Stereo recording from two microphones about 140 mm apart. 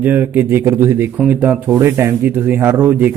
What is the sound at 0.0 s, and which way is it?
Speech, 15° right (ahead or behind).